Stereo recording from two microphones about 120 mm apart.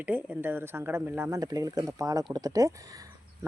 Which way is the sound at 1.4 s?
35° right (ahead or behind).